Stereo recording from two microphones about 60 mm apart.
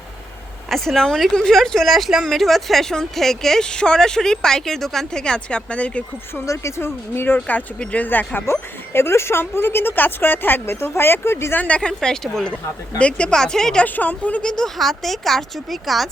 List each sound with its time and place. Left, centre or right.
0.7 s speech: centre
5.2 s speech: centre
6.4 s speech: left
7.3 s speech: left
8.4 s speech: left
11.5 s speech: left
11.9 s speech: centre
13.0 s speech: centre
13.8 s speech: left
14.4 s speech: centre